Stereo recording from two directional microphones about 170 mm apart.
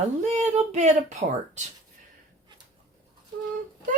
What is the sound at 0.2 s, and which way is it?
Speech, 40° right (ahead or behind).